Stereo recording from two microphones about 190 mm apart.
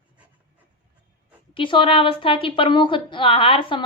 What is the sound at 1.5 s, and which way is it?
A woman's voice, 25° left (ahead or behind).